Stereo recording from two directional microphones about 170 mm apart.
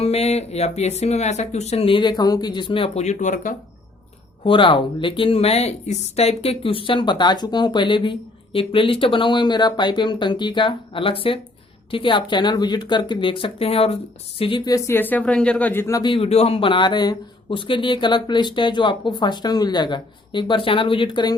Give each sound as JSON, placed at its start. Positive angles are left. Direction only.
{"t": 0.0, "sound": "speech", "side_deg": 40}
{"t": 4.4, "sound": "speech", "side_deg": 30}